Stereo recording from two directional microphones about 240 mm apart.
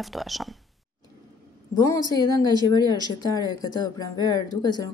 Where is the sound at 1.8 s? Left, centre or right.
Centre.